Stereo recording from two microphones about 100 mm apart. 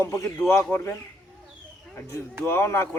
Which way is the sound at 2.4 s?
25° left (ahead or behind).